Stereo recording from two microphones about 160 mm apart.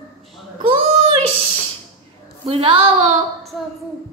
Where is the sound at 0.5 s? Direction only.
35° right (ahead or behind).